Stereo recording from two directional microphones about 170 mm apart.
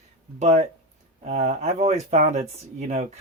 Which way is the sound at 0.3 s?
40° right (ahead or behind).